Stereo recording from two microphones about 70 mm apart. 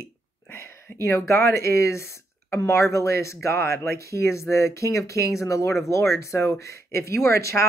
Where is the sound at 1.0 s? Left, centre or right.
Left.